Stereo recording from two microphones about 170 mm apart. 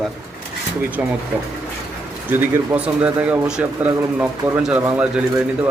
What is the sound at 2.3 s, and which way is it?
Speech, 10° right (ahead or behind).